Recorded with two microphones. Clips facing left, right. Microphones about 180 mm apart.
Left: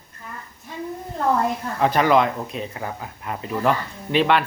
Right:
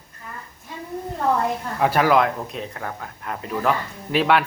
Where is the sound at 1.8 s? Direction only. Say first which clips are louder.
Even; 5° right (ahead or behind).